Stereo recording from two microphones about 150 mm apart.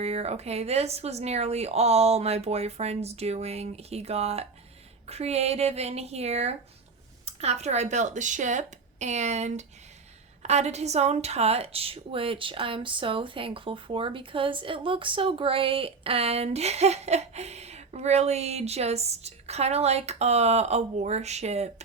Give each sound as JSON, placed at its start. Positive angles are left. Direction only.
{"t": 0.0, "sound": "a woman's voice", "side_deg": -45}